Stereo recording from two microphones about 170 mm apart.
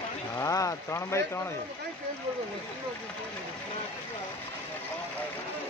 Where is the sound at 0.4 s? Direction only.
20° left (ahead or behind).